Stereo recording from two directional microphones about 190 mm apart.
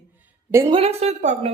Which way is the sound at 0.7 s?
30° right (ahead or behind).